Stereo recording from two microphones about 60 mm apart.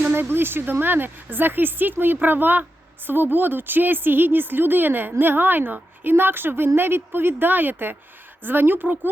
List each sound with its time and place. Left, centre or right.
0.0 s speech: right